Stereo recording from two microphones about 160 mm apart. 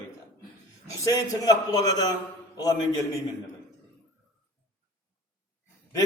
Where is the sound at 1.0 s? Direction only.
20° left (ahead or behind).